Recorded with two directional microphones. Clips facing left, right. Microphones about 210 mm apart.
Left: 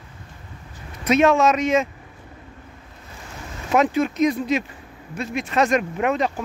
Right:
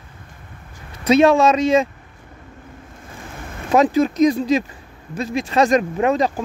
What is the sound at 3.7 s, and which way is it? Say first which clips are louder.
Speech: right 4 dB; 35° right (ahead or behind).